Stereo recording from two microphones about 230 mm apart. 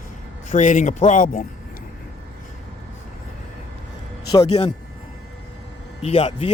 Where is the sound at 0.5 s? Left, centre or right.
Left.